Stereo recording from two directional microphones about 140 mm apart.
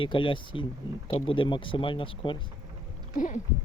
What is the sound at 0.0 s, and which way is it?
Speech, 35° left (ahead or behind).